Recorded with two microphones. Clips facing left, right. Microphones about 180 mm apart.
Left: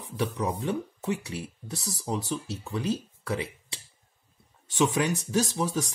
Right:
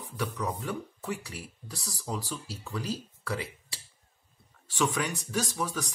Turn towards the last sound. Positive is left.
turn(degrees=25)  # may be behind; listen again after turning